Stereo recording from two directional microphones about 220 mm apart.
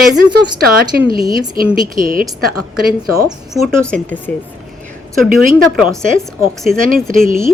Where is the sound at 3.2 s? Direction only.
Centre (ahead or behind).